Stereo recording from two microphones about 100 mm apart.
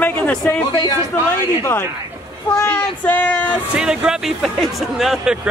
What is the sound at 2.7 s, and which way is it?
Speech, 15° left (ahead or behind).